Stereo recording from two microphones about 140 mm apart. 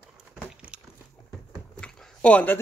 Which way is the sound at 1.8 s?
5° left (ahead or behind).